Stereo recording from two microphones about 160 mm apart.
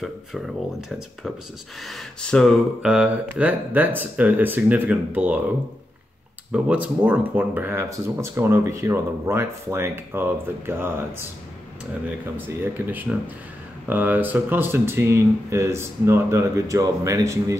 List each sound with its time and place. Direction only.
0.0 s speech: centre (ahead or behind)
6.5 s speech: 10° right (ahead or behind)
12.4 s speech: 10° right (ahead or behind)